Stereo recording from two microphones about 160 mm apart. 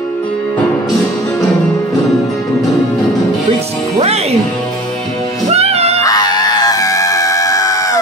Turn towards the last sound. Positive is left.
turn(degrees=20)  # may be behind; listen again after turning